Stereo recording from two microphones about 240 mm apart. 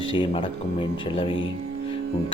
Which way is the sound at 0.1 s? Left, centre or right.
Left.